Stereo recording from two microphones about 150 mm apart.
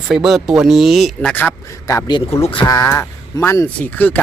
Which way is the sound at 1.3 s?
15° left (ahead or behind).